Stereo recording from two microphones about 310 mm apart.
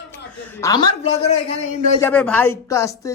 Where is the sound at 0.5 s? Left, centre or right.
Centre.